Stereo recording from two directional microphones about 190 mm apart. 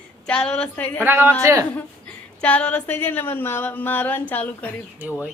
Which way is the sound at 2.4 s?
5° left (ahead or behind).